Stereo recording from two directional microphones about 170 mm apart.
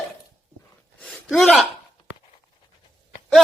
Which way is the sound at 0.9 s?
Centre (ahead or behind).